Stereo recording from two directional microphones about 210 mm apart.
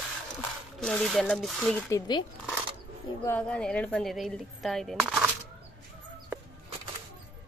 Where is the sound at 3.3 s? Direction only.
5° left (ahead or behind).